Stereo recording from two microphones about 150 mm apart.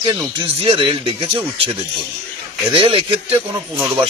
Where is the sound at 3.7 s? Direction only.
15° right (ahead or behind).